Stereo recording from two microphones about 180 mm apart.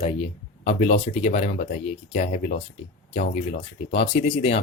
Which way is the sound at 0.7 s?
35° left (ahead or behind).